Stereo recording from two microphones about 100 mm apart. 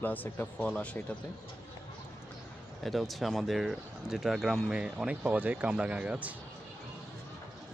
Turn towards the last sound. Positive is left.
turn(degrees=-15)  # may be behind; listen again after turning